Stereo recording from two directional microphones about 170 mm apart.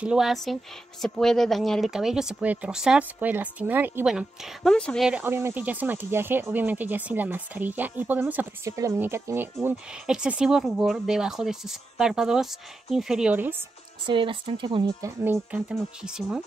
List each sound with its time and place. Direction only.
0.0 s speech: 5° right (ahead or behind)
5.2 s speech: 15° right (ahead or behind)
14.0 s speech: 30° right (ahead or behind)
15.0 s speech: 15° right (ahead or behind)
15.7 s speech: centre (ahead or behind)